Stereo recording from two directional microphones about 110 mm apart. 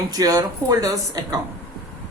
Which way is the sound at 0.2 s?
35° right (ahead or behind).